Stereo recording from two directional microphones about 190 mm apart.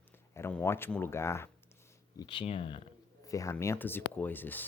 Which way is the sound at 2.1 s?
25° left (ahead or behind).